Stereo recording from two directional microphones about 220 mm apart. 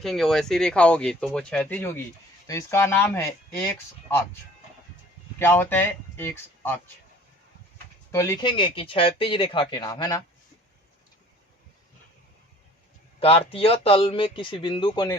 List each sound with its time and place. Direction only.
0.0 s speech: centre (ahead or behind)
5.4 s speech: 10° left (ahead or behind)
8.1 s speech: 15° left (ahead or behind)
13.1 s speech: 25° left (ahead or behind)